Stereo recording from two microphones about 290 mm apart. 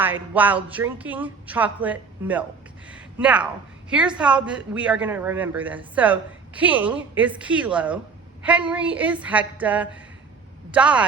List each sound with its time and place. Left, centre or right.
0.0 s a man's voice: centre